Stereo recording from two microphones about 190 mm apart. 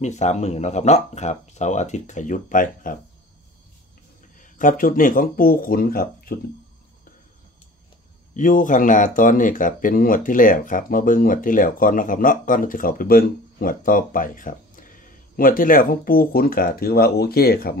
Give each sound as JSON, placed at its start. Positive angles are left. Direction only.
{"t": 0.0, "sound": "speech", "side_deg": 35}
{"t": 4.4, "sound": "speech", "side_deg": 45}
{"t": 8.4, "sound": "speech", "side_deg": 45}